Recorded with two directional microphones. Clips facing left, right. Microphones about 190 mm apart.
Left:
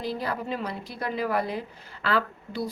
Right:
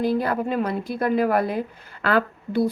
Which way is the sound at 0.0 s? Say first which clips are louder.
Right 8 dB; 55° right (ahead or behind).